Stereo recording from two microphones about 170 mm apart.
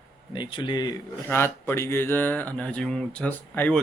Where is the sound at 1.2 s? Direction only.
15° left (ahead or behind).